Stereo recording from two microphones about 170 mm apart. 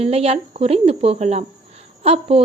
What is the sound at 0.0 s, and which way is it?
A woman's voice, 35° right (ahead or behind).